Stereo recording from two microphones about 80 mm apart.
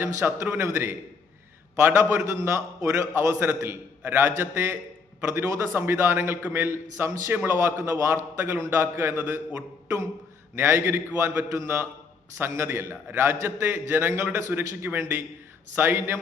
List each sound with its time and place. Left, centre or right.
0.0 s a man's voice: right
10.5 s a man's voice: right